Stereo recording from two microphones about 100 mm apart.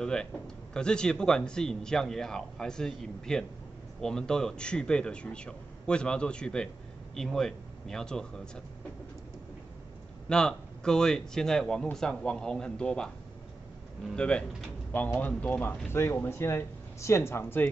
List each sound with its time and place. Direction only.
0.0 s speech: 5° left (ahead or behind)
10.2 s speech: 10° left (ahead or behind)
14.1 s speech: 10° left (ahead or behind)